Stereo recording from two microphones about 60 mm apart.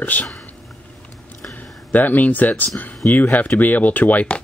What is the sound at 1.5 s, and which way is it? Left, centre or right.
Speech, left.